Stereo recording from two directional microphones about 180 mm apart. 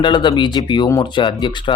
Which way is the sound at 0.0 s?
25° left (ahead or behind).